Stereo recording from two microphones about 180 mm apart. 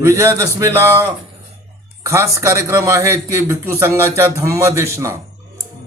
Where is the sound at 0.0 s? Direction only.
15° right (ahead or behind).